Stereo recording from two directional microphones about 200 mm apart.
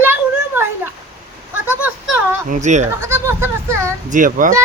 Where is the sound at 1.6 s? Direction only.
10° right (ahead or behind).